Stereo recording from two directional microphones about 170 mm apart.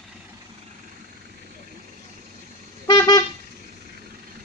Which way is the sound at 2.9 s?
25° left (ahead or behind).